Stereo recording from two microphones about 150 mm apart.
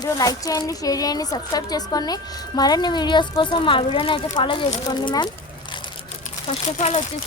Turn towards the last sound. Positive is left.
turn(degrees=50)  # may be behind; listen again after turning